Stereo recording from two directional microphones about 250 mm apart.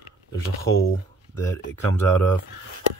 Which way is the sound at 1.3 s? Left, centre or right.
Centre.